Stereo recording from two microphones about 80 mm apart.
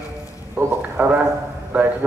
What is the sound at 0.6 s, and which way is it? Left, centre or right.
Speech, right.